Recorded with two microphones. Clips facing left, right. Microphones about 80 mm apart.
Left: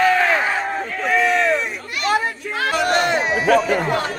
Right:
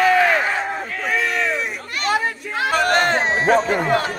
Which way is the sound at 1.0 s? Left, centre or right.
Centre.